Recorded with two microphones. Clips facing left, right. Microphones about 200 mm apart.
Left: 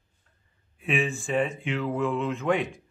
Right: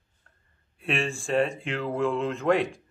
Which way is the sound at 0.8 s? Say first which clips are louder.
Left 1 dB; centre (ahead or behind).